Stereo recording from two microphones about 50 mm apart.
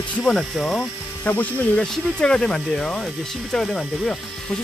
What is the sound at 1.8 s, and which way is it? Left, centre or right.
Speech, centre.